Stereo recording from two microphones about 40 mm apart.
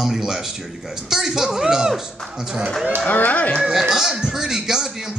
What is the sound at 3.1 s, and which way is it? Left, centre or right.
Speech, left.